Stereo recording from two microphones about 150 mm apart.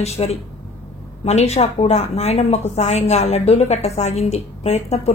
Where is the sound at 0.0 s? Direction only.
45° left (ahead or behind).